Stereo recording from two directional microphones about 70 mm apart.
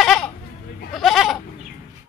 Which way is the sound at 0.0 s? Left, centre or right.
Centre.